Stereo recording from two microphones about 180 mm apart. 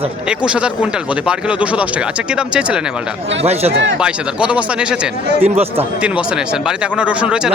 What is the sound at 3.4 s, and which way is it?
Speech, 35° right (ahead or behind).